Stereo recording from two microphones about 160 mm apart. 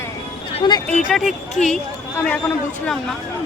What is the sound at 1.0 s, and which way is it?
Speech, centre (ahead or behind).